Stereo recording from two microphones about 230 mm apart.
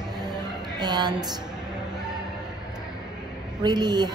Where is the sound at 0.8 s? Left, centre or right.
Centre.